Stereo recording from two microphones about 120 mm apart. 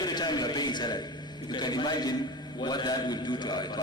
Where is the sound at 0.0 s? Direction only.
35° left (ahead or behind).